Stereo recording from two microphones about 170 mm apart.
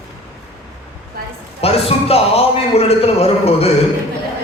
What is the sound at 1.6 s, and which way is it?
A man's voice, 35° left (ahead or behind).